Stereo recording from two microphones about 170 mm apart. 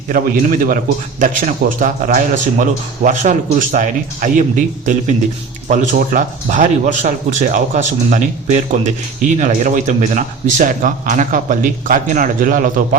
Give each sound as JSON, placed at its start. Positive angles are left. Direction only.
{"t": 0.1, "sound": "a man's voice", "side_deg": -55}